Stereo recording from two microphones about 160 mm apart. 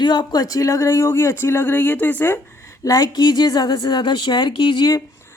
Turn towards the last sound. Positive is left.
turn(degrees=20)  # may be behind; listen again after turning